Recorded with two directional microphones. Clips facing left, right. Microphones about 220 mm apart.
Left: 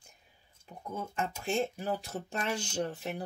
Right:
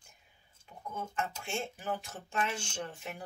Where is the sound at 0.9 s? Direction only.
35° left (ahead or behind).